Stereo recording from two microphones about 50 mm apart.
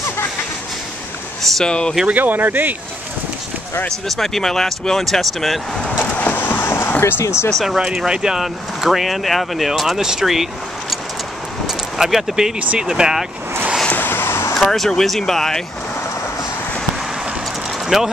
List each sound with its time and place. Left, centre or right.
1.5 s speech: centre
2.0 s speech: right
4.2 s speech: centre
6.1 s train: left
6.4 s a sound: left
7.0 s speech: left
7.6 s speech: centre
11.6 s vehicle: centre
12.7 s speech: centre
13.8 s vehicle: left
14.1 s a sound: left
14.6 s speech: centre
17.8 s speech: centre